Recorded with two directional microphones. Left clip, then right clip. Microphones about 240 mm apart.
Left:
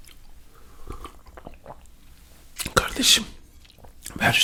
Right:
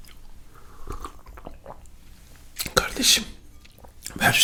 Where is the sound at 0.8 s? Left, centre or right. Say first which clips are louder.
Right 3 dB; left.